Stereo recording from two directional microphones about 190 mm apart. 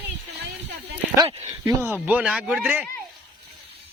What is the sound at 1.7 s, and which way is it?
Speech, 10° right (ahead or behind).